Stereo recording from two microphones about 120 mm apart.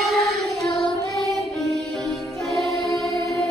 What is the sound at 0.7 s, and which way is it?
Music, centre (ahead or behind).